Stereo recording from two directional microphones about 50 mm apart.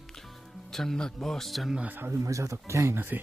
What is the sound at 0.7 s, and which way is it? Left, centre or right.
Speech, centre.